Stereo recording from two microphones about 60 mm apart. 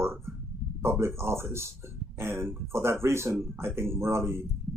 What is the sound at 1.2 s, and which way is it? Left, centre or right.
Speech, right.